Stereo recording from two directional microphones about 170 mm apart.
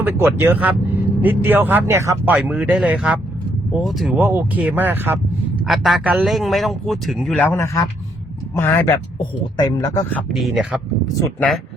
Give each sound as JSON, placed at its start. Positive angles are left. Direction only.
{"t": 0.0, "sound": "a man's voice", "side_deg": -10}
{"t": 4.2, "sound": "speech", "side_deg": -10}
{"t": 5.6, "sound": "a man's voice", "side_deg": 0}
{"t": 9.1, "sound": "speech", "side_deg": 25}
{"t": 10.2, "sound": "a man's voice", "side_deg": 0}